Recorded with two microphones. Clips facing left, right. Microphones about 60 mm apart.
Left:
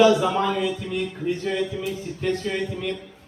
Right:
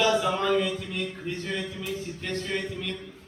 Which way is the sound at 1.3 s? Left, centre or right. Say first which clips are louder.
Left 7 dB; centre.